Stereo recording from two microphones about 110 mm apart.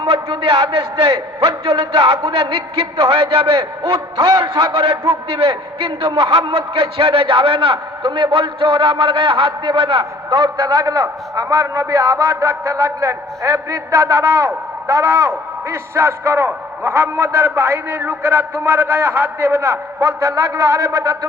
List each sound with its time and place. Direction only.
0.0 s a man's voice: 55° right (ahead or behind); by 21.2 s 30° right (ahead or behind)